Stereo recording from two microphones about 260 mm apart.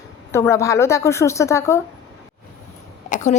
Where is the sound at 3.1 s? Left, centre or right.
Left.